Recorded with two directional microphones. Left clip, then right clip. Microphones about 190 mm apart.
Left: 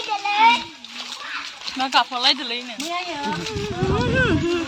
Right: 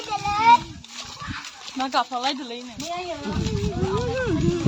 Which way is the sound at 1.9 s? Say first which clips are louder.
Left 6 dB; 50° right (ahead or behind).